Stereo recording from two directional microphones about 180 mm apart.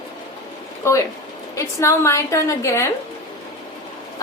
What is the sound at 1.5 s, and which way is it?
A woman's voice, 15° left (ahead or behind).